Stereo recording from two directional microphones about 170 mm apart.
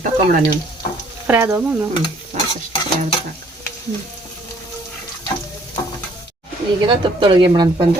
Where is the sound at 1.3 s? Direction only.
15° right (ahead or behind).